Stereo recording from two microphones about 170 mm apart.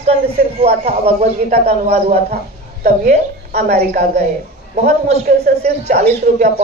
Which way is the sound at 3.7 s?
40° right (ahead or behind).